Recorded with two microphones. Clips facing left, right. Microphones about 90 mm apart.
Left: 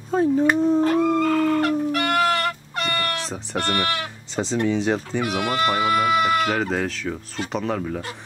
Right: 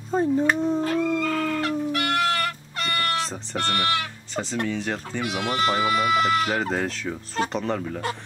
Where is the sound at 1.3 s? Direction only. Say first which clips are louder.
Left 5 dB; 45° left (ahead or behind).